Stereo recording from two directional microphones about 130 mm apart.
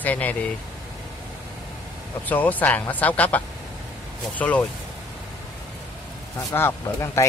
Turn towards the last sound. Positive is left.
turn(degrees=20)  # may be behind; listen again after turning